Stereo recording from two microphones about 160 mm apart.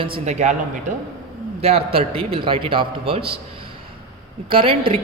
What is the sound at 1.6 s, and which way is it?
Speech, 35° right (ahead or behind).